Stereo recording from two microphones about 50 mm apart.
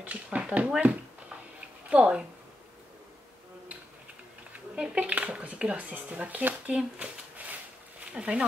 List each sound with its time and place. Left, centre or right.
0.0 s speech: right
4.7 s speech: right
7.4 s a sound: right
8.1 s speech: right